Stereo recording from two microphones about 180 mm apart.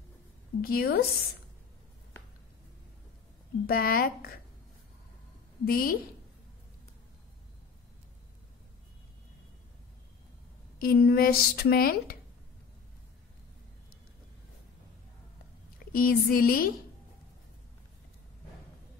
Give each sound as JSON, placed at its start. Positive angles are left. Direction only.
{"t": 0.6, "sound": "speech", "side_deg": 55}
{"t": 3.6, "sound": "speech", "side_deg": 55}
{"t": 5.7, "sound": "a woman's voice", "side_deg": 55}
{"t": 10.8, "sound": "speech", "side_deg": 60}
{"t": 15.9, "sound": "a woman's voice", "side_deg": 55}